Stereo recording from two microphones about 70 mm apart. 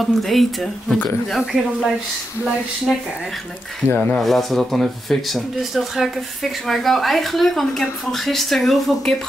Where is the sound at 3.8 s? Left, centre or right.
Right.